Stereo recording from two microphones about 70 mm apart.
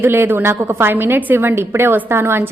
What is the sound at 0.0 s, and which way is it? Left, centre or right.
A woman's voice, right.